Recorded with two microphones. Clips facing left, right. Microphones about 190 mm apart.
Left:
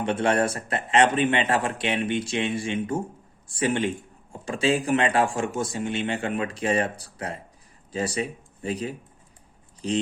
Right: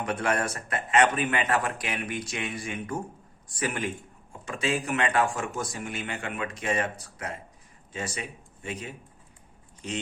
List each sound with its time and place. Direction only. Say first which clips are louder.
0.0 s speech: left 5 dB; 30° left (ahead or behind)